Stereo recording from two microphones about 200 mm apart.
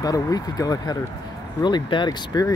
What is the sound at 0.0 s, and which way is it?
Speech, 20° left (ahead or behind).